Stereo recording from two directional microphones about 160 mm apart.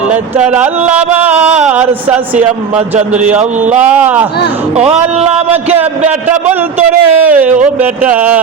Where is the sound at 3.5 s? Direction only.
45° right (ahead or behind).